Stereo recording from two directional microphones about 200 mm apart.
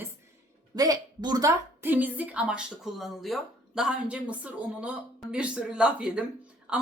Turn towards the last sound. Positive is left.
turn(degrees=-5)  # may be behind; listen again after turning